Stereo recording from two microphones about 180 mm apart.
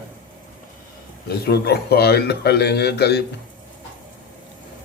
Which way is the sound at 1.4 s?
65° left (ahead or behind).